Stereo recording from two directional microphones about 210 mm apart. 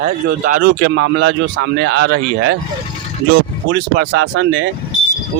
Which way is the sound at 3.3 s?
55° right (ahead or behind).